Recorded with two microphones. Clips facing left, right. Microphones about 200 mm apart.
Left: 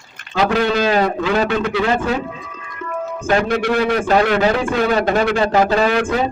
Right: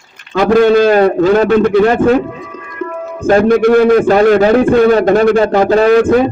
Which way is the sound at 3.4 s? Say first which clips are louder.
Right 10 dB; 45° right (ahead or behind).